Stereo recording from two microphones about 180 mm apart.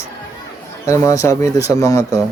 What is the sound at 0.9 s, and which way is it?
Speech, 15° left (ahead or behind).